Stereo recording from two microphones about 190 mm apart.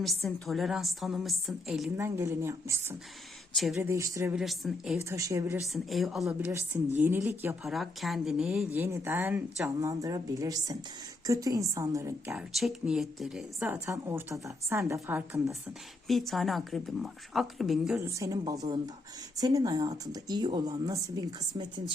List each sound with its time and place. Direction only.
0.3 s speech: centre (ahead or behind)
2.0 s speech: 15° right (ahead or behind)
3.5 s speech: centre (ahead or behind)
3.8 s speech: 15° right (ahead or behind)
4.4 s speech: centre (ahead or behind)
5.0 s speech: 15° right (ahead or behind)
5.6 s speech: centre (ahead or behind)
7.6 s speech: centre (ahead or behind)
12.3 s speech: centre (ahead or behind)
13.8 s speech: 15° right (ahead or behind)
16.0 s speech: centre (ahead or behind)
18.0 s speech: 15° right (ahead or behind)